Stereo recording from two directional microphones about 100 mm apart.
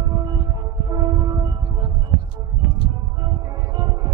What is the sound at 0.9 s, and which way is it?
Music, 40° right (ahead or behind).